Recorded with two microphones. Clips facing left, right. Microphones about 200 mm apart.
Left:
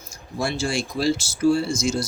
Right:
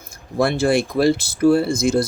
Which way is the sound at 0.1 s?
55° right (ahead or behind).